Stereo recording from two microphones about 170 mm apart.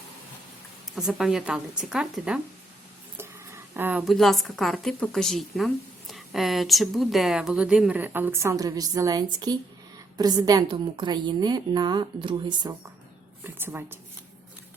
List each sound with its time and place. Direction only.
0.9 s a woman's voice: 5° right (ahead or behind)
3.2 s a sound: 15° right (ahead or behind)
4.1 s a woman's voice: centre (ahead or behind); by 12.7 s 30° right (ahead or behind)
13.4 s a woman's voice: 10° right (ahead or behind)